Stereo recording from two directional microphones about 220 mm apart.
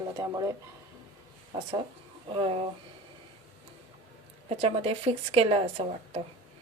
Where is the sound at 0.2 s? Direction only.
15° right (ahead or behind).